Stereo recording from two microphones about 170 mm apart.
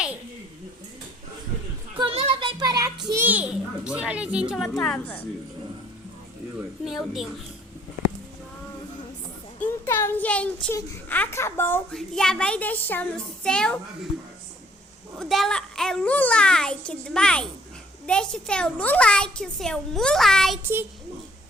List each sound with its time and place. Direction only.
2.0 s music: 35° right (ahead or behind)
3.1 s children playing: 10° right (ahead or behind)
6.8 s a child's voice: centre (ahead or behind)
9.6 s speech: 15° left (ahead or behind)
11.9 s a child's voice: 5° left (ahead or behind)
15.2 s a child's voice: centre (ahead or behind)